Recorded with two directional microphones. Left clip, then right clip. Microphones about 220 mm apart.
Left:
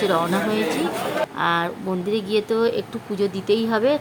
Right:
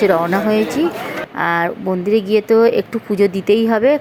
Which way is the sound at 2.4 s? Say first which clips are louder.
Right 9 dB; 20° right (ahead or behind).